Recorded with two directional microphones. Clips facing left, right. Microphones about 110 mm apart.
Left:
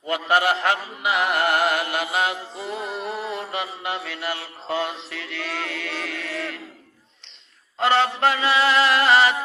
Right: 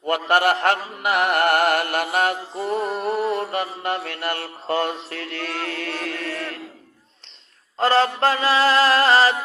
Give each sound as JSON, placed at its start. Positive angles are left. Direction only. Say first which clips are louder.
{"t": 0.1, "sound": "music", "louder": "right 2 dB", "side_deg": -55}
{"t": 7.8, "sound": "mantra", "louder": "right 1 dB", "side_deg": -40}